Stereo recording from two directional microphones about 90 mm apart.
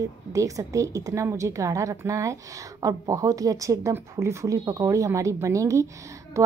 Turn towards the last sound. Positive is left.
turn(degrees=-35)  # may be behind; listen again after turning